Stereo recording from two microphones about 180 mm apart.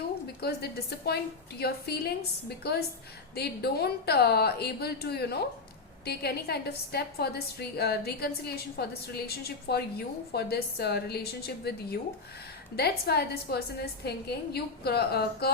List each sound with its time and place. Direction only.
0.4 s a woman's voice: 65° left (ahead or behind)